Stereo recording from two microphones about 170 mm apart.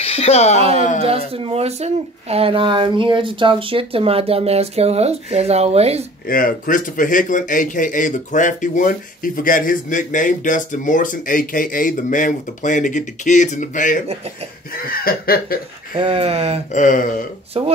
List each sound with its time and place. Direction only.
0.0 s speech: 35° left (ahead or behind)
0.6 s speech: 35° right (ahead or behind)
6.2 s a man's voice: 55° left (ahead or behind)
14.7 s chuckle: 60° left (ahead or behind)
16.0 s speech: 35° right (ahead or behind)
16.7 s a man's voice: 50° left (ahead or behind)
17.6 s speech: 35° right (ahead or behind)